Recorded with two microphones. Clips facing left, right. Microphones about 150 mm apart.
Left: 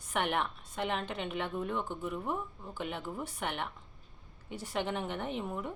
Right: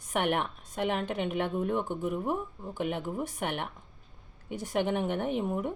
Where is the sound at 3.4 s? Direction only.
50° right (ahead or behind).